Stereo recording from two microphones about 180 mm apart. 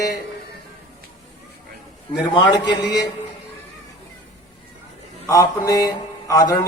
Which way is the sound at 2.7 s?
65° left (ahead or behind).